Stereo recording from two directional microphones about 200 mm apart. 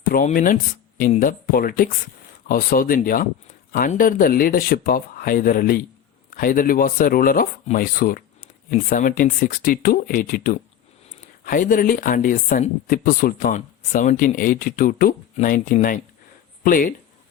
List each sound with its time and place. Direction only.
0.1 s speech: 45° left (ahead or behind)